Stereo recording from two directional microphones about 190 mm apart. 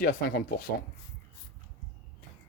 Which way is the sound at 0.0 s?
55° left (ahead or behind).